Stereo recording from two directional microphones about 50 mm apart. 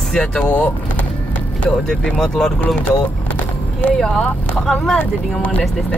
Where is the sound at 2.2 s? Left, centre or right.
Centre.